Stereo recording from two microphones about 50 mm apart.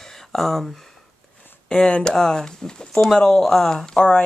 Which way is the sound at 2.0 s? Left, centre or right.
Centre.